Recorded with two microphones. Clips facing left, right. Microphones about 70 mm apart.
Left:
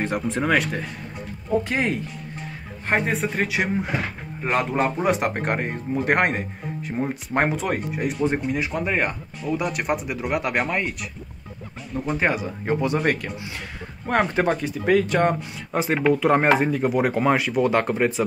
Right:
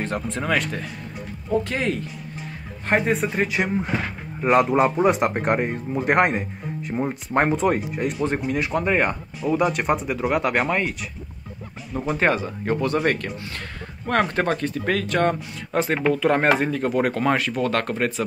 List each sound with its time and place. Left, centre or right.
0.3 s speech: centre
2.9 s speech: centre
12.4 s speech: centre
13.0 s speech: centre